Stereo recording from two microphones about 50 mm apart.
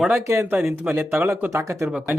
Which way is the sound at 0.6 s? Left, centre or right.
Right.